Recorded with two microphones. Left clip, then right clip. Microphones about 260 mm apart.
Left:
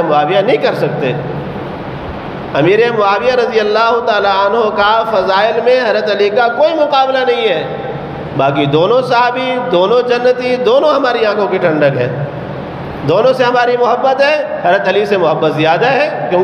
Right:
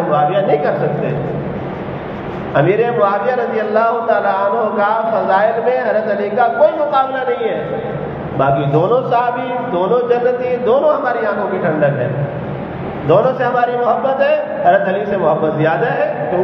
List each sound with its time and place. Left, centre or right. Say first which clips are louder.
0.1 s a man's voice: left 1 dB; left
2.5 s a man's voice: left 3 dB; left
13.1 s a man's voice: left 3 dB; left